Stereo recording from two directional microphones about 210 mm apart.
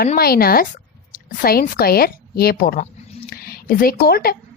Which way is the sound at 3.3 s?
45° left (ahead or behind).